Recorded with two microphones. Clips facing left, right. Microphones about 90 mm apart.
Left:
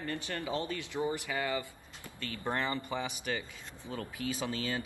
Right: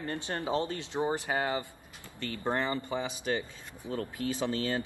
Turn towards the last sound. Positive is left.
turn(degrees=-25)  # may be behind; listen again after turning